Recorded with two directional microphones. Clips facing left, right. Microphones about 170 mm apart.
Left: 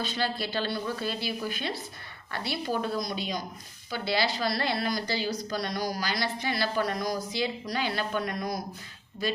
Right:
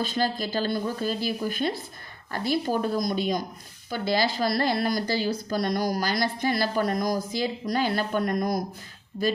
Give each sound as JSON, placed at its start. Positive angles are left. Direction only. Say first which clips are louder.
{"t": 0.0, "sound": "a woman's voice", "louder": "right 4 dB", "side_deg": -45}